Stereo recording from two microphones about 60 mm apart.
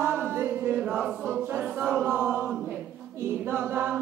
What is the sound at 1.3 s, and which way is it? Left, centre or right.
A capella, right.